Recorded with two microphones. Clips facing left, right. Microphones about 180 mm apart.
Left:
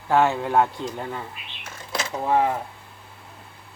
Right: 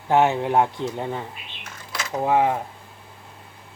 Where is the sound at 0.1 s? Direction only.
20° right (ahead or behind).